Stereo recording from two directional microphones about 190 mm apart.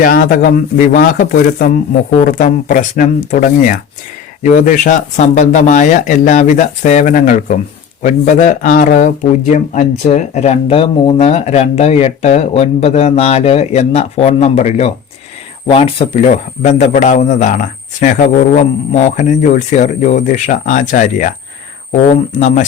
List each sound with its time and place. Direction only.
0.0 s speech: 45° left (ahead or behind)